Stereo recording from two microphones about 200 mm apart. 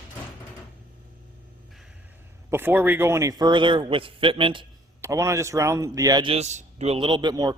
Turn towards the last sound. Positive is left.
turn(degrees=-20)  # may be behind; listen again after turning